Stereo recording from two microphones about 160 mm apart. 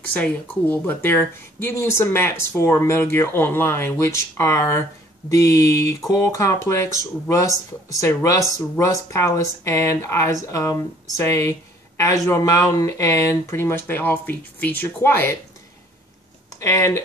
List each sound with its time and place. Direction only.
0.1 s speech: 10° left (ahead or behind)
16.4 s speech: 20° left (ahead or behind)